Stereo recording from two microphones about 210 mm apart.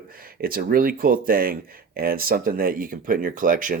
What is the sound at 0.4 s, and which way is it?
Speech, 45° right (ahead or behind).